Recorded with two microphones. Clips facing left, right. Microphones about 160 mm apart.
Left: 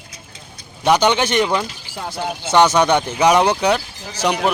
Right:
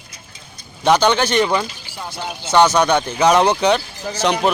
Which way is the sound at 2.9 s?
20° left (ahead or behind).